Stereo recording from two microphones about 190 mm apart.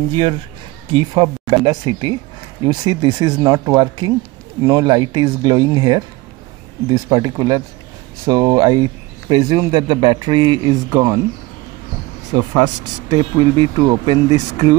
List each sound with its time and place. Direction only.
0.1 s speech: 25° right (ahead or behind)
12.5 s speech: 25° right (ahead or behind)